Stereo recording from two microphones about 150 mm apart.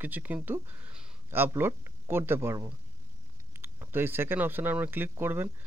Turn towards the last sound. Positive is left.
turn(degrees=-15)  # may be behind; listen again after turning